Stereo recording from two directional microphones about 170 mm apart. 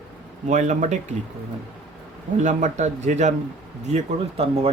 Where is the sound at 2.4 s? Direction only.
45° right (ahead or behind).